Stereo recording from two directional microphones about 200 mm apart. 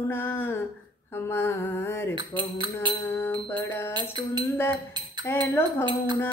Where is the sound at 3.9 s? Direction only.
25° right (ahead or behind).